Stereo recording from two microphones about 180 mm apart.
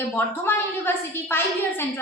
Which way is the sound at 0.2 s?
10° left (ahead or behind).